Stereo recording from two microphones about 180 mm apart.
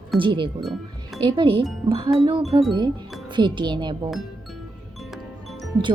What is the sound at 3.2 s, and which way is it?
Speech, 25° right (ahead or behind).